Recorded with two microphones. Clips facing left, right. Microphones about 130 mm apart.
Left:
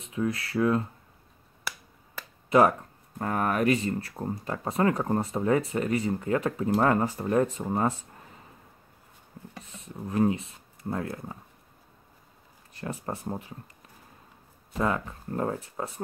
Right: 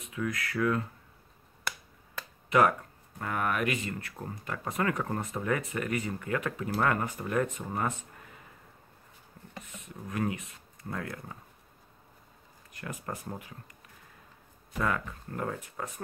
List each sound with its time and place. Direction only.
0.0 s speech: 30° left (ahead or behind)
1.7 s finger snapping: 5° left (ahead or behind)
3.2 s speech: 35° left (ahead or behind)
10.0 s speech: 30° left (ahead or behind)
12.7 s speech: 30° left (ahead or behind)
14.8 s speech: 25° left (ahead or behind)